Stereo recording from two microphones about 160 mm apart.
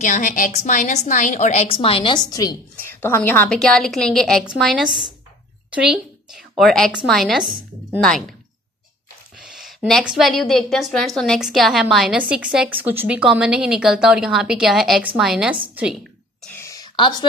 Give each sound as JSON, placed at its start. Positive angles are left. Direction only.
{"t": 0.0, "sound": "a woman's voice", "side_deg": 50}
{"t": 2.7, "sound": "a woman's voice", "side_deg": 15}
{"t": 9.4, "sound": "a woman's voice", "side_deg": 0}
{"t": 16.4, "sound": "a sound", "side_deg": 15}